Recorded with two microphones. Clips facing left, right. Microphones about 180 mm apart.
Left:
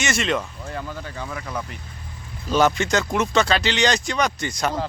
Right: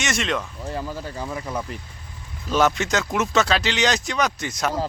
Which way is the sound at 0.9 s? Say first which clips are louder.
Right 2 dB; 35° right (ahead or behind).